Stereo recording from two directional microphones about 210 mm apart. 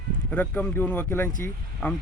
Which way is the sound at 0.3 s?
5° left (ahead or behind).